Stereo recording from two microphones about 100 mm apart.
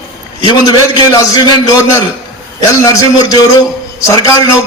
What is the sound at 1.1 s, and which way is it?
A man's voice, 35° left (ahead or behind).